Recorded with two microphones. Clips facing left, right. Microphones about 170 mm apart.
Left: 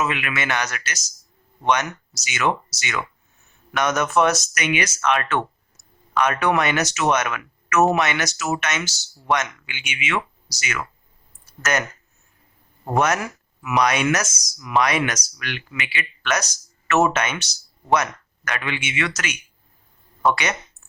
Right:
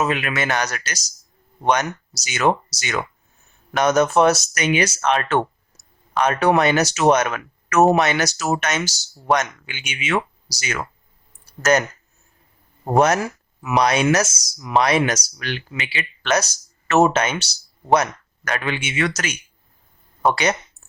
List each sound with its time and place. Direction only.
0.0 s speech: 35° right (ahead or behind)
11.4 s a sound: 30° right (ahead or behind)
12.8 s speech: 30° right (ahead or behind)